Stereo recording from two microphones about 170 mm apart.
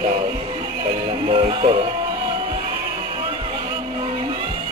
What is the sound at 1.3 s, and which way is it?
Music, 30° right (ahead or behind).